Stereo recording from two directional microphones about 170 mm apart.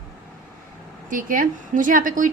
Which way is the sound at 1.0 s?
55° right (ahead or behind).